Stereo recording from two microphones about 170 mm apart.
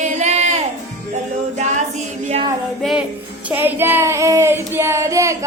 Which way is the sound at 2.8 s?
Centre (ahead or behind).